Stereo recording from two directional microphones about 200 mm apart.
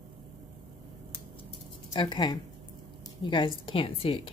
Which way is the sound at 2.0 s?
20° left (ahead or behind).